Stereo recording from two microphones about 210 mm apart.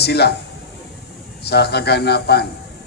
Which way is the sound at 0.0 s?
50° left (ahead or behind).